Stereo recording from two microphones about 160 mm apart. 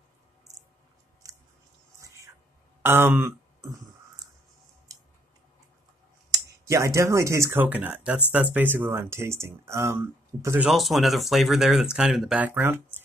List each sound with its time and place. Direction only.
2.0 s music: 20° right (ahead or behind)
2.8 s speech: 15° right (ahead or behind)
6.3 s speech: 20° right (ahead or behind)
10.7 s speech: centre (ahead or behind)